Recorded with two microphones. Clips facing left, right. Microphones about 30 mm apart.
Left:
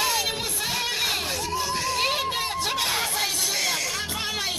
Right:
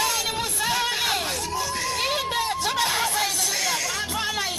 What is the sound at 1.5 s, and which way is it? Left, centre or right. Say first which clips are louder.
Music: even; centre.